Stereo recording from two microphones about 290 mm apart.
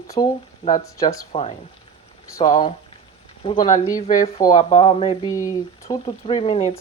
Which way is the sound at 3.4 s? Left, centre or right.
Centre.